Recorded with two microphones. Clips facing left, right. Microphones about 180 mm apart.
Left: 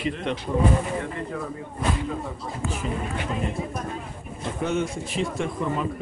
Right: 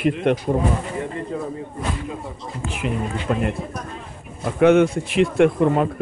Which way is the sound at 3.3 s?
60° right (ahead or behind).